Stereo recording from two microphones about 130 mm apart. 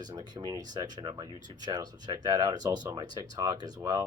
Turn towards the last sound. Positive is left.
turn(degrees=-30)  # may be behind; listen again after turning